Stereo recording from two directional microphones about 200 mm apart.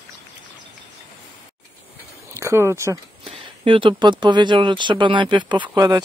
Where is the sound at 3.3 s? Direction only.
25° right (ahead or behind).